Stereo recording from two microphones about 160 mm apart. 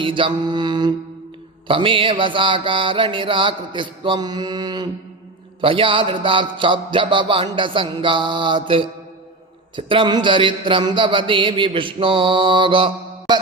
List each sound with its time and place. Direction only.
0.0 s mantra: 30° right (ahead or behind)
1.6 s a man's voice: 35° right (ahead or behind)